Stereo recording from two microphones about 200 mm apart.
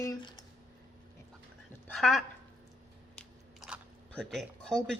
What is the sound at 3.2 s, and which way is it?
Biting, centre (ahead or behind).